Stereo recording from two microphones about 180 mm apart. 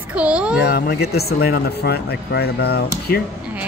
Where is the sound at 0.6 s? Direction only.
60° left (ahead or behind).